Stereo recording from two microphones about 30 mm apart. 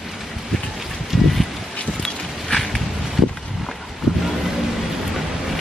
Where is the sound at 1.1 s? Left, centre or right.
Centre.